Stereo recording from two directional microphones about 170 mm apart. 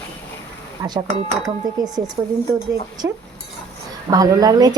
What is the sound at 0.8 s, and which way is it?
Speech, 15° right (ahead or behind).